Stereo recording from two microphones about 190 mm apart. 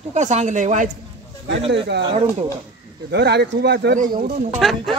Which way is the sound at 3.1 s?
60° right (ahead or behind).